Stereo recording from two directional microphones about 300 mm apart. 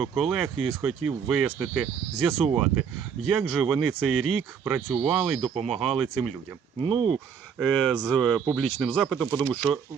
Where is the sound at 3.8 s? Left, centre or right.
Right.